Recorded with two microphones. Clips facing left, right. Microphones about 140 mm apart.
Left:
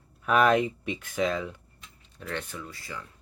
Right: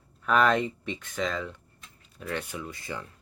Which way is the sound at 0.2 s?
10° left (ahead or behind).